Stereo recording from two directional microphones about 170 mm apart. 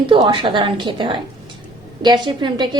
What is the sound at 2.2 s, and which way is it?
Speech, 25° right (ahead or behind).